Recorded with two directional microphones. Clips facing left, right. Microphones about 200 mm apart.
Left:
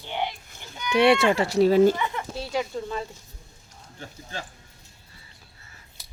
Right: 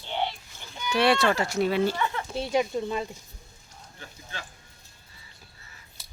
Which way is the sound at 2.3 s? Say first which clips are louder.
Right 3 dB; 20° right (ahead or behind).